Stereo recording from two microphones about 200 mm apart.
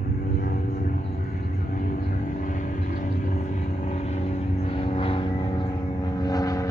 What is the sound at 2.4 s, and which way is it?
Vehicle, 40° left (ahead or behind).